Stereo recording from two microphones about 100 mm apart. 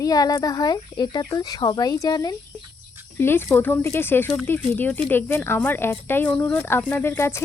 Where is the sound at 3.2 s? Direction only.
25° left (ahead or behind).